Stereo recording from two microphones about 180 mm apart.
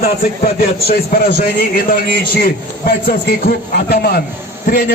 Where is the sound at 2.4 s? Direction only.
55° left (ahead or behind).